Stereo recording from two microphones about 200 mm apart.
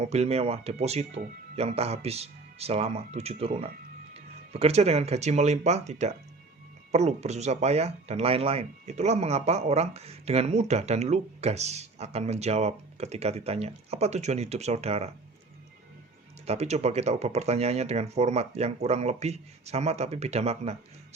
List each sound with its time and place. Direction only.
0.0 s speech: 35° right (ahead or behind)
16.5 s speech: 35° right (ahead or behind)